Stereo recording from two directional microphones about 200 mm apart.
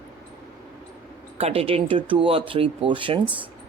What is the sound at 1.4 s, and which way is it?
A woman's voice, 30° right (ahead or behind).